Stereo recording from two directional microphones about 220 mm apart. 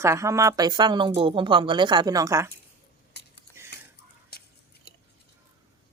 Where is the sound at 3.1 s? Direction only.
50° left (ahead or behind).